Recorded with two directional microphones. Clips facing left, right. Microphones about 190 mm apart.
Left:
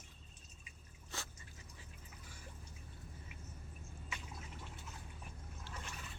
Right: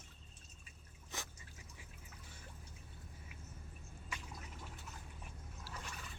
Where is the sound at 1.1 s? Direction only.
15° right (ahead or behind).